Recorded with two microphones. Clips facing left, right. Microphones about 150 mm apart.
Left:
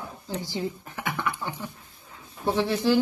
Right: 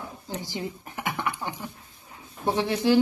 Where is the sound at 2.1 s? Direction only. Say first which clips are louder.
Left 1 dB; 15° right (ahead or behind).